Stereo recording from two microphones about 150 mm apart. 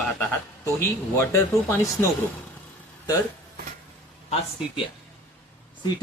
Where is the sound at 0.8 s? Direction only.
15° left (ahead or behind).